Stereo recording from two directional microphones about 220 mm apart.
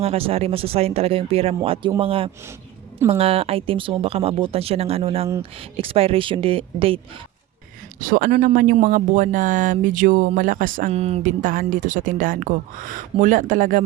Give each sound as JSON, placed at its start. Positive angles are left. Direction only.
{"t": 0.0, "sound": "speech", "side_deg": -25}
{"t": 8.0, "sound": "speech", "side_deg": -40}